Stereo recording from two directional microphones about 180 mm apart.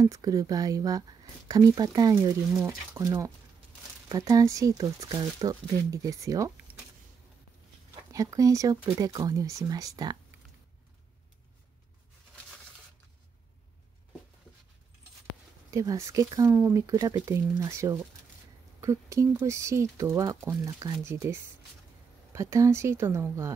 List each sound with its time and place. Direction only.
0.0 s speech: 20° right (ahead or behind)
7.9 s speech: 20° right (ahead or behind)
15.7 s speech: 20° right (ahead or behind)